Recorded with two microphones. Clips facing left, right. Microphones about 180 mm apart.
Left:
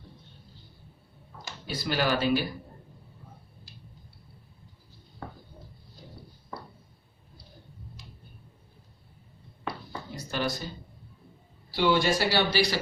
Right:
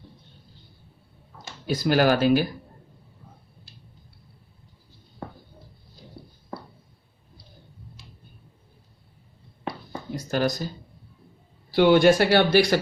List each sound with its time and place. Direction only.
1.6 s speech: 45° right (ahead or behind)
10.3 s speech: 40° right (ahead or behind)
11.7 s speech: 55° right (ahead or behind)